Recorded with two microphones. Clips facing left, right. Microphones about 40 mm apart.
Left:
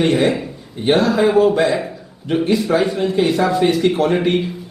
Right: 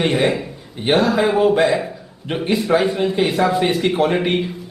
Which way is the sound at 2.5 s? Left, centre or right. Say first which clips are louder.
Right 1 dB; centre.